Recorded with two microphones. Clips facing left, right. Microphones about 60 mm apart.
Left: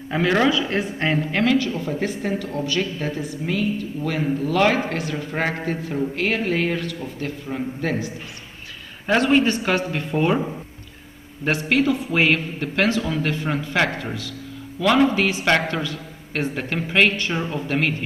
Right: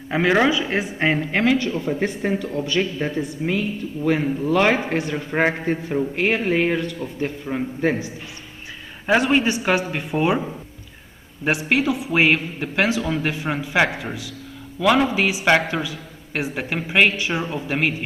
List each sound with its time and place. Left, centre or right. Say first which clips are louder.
0.1 s a man's voice: right 1 dB; centre
9.0 s a man's voice: even; centre
11.4 s a man's voice: even; centre